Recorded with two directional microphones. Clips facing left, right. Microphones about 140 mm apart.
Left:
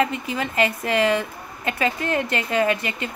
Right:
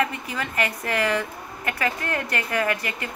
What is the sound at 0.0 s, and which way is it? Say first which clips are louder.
A woman's voice: left 3 dB; 25° left (ahead or behind).